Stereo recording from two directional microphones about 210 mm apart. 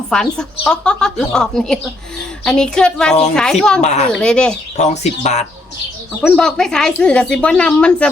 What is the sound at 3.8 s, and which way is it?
Speech, 35° left (ahead or behind).